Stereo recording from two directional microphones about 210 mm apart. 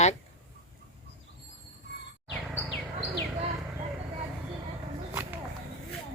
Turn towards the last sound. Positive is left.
turn(degrees=-10)  # may be behind; listen again after turning